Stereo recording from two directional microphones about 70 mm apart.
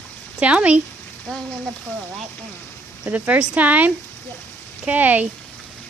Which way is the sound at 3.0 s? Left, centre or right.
Right.